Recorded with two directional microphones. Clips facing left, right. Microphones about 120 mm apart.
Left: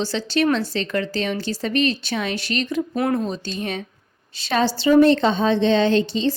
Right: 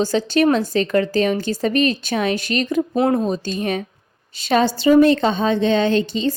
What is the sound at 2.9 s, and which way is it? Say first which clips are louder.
Speech: right 4 dB; 25° right (ahead or behind).